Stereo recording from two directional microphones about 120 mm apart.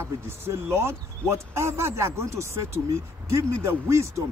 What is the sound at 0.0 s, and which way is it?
Speech, 20° right (ahead or behind).